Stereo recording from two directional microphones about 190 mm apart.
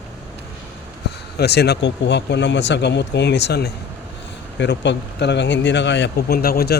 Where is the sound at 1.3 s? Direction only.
60° left (ahead or behind).